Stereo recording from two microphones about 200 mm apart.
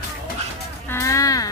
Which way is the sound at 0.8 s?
15° left (ahead or behind).